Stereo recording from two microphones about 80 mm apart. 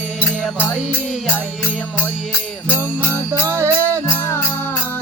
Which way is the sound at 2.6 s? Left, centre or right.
Right.